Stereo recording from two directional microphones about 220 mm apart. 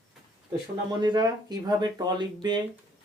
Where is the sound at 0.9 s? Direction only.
20° right (ahead or behind).